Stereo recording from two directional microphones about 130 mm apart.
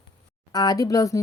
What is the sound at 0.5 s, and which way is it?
Speech, 30° left (ahead or behind).